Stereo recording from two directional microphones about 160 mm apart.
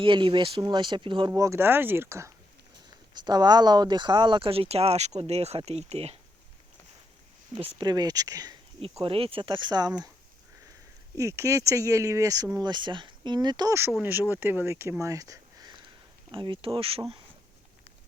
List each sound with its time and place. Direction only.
0.0 s speech: 30° right (ahead or behind)
1.3 s speech: 15° right (ahead or behind); by 6.1 s 40° right (ahead or behind)
7.5 s speech: 35° right (ahead or behind)
8.8 s speech: 35° right (ahead or behind)
11.2 s speech: 20° right (ahead or behind)
16.3 s speech: 30° right (ahead or behind)